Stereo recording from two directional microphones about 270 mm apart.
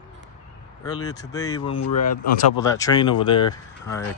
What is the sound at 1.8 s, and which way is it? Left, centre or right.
Speech, left.